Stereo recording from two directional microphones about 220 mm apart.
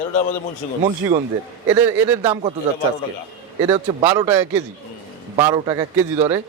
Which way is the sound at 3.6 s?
20° right (ahead or behind).